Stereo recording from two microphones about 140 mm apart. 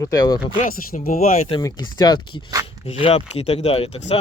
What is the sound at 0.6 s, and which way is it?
Speech, 90° left.